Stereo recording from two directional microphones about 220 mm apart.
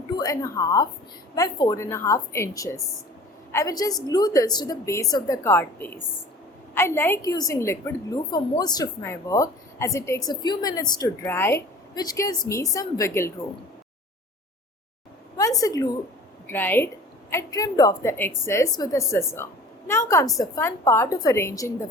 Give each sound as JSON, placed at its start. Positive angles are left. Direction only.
{"t": 0.2, "sound": "a woman's voice", "side_deg": 15}
{"t": 15.4, "sound": "a woman's voice", "side_deg": 15}